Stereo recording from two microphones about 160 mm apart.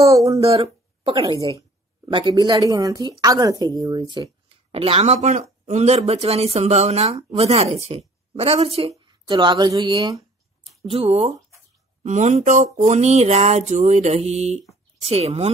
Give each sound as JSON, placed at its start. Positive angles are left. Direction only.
{"t": 0.0, "sound": "a woman's voice", "side_deg": -20}
{"t": 4.5, "sound": "a woman's voice", "side_deg": -35}
{"t": 12.0, "sound": "a sound", "side_deg": -45}
{"t": 15.0, "sound": "speech", "side_deg": -40}